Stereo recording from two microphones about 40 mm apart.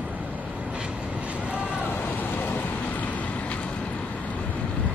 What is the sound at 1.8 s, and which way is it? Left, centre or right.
Vehicle, left.